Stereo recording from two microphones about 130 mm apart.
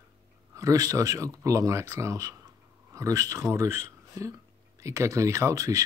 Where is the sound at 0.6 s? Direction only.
25° right (ahead or behind).